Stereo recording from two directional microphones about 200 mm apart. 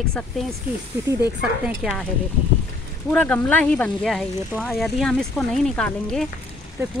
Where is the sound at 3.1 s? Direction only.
5° left (ahead or behind).